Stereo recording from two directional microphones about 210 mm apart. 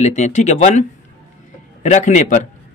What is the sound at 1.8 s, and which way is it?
Speech, 35° left (ahead or behind).